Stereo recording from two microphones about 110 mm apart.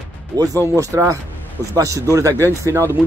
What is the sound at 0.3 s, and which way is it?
Speech, 35° right (ahead or behind).